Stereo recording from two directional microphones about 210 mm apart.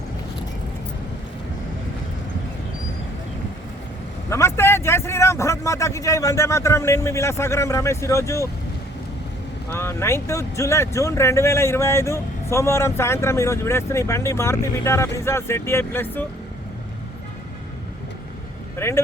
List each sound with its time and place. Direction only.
4.3 s speech: 10° left (ahead or behind)
9.7 s speech: 10° left (ahead or behind)
18.8 s speech: 10° left (ahead or behind)